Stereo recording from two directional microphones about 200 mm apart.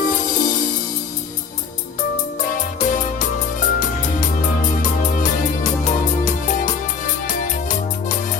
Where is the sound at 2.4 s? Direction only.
40° left (ahead or behind).